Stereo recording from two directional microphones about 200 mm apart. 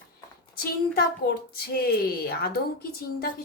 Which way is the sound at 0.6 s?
50° left (ahead or behind).